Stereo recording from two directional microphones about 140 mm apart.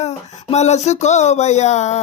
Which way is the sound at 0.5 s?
55° left (ahead or behind).